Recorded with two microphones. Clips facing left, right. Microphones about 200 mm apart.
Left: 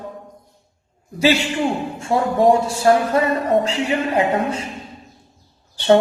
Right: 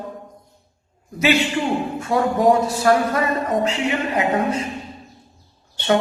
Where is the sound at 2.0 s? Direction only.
30° left (ahead or behind).